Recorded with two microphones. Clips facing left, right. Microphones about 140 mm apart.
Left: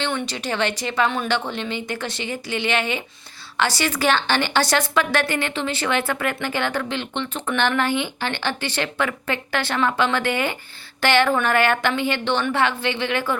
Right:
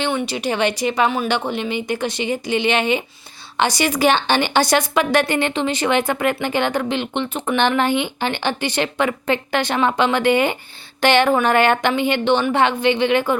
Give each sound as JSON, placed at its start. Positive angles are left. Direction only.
{"t": 0.0, "sound": "a woman's voice", "side_deg": -10}